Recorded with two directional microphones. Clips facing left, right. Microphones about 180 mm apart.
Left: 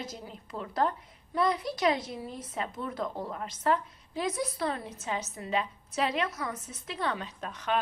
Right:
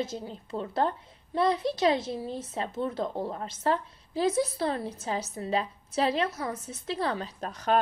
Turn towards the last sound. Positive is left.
turn(degrees=-40)  # may be behind; listen again after turning